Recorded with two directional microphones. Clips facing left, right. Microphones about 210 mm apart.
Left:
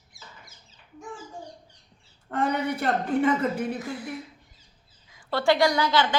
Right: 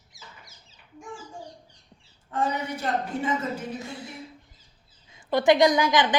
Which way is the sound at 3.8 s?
25° right (ahead or behind).